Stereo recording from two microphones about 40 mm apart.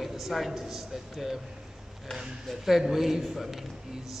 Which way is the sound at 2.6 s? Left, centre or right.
Centre.